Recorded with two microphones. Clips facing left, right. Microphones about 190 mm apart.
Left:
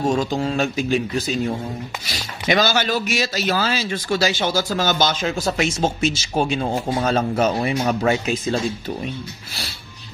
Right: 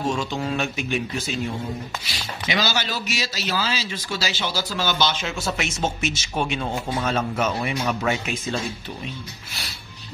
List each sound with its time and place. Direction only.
0.0 s speech: 40° left (ahead or behind)
2.0 s a man's voice: 50° left (ahead or behind); by 8.5 s 35° left (ahead or behind)